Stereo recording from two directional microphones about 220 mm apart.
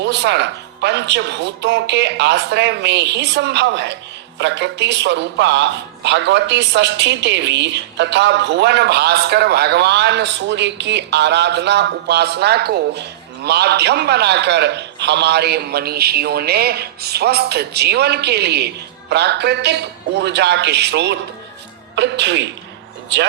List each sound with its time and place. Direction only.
0.0 s speech: 50° right (ahead or behind)